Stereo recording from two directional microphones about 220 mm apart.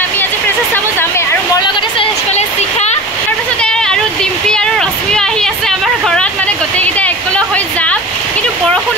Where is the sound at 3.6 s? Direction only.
5° left (ahead or behind).